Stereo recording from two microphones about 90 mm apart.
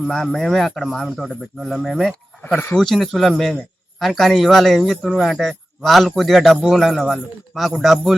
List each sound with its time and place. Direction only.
0.1 s speech: 5° left (ahead or behind)